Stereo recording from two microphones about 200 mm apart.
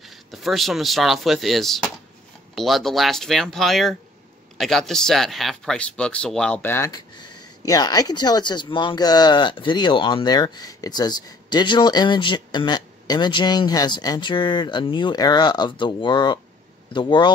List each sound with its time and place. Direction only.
0.0 s speech: centre (ahead or behind); by 17.3 s 25° left (ahead or behind)